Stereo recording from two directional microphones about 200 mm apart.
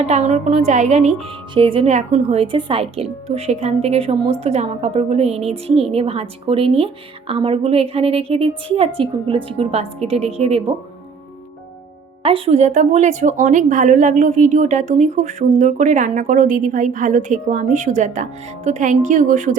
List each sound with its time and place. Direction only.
0.0 s a woman's voice: 35° right (ahead or behind)
12.2 s speech: 30° right (ahead or behind)